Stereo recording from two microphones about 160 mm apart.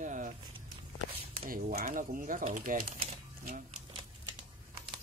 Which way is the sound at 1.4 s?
65° right (ahead or behind).